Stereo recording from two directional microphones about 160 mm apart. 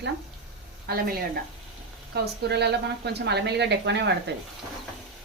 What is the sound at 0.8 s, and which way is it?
Speech, 75° right (ahead or behind).